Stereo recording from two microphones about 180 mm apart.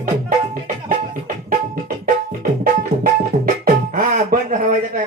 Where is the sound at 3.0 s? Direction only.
50° right (ahead or behind).